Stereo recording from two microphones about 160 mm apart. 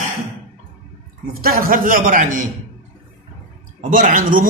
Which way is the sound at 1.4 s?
65° right (ahead or behind).